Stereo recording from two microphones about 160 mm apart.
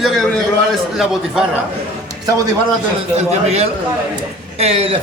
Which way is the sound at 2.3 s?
20° right (ahead or behind).